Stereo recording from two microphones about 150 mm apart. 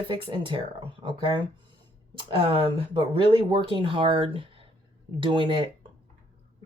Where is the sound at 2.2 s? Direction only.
30° right (ahead or behind).